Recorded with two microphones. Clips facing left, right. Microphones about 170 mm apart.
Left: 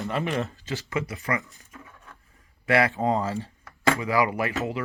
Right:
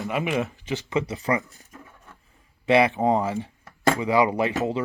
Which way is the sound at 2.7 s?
20° right (ahead or behind).